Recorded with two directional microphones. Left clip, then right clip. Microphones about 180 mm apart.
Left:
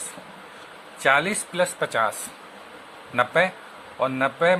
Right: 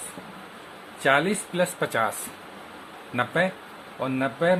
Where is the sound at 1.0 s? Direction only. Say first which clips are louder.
Left 2 dB; 15° left (ahead or behind).